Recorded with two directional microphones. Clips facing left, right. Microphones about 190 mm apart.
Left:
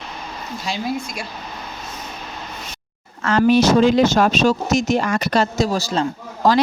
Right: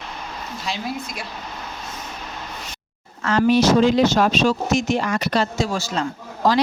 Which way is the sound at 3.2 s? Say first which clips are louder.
Left 2 dB; 55° left (ahead or behind).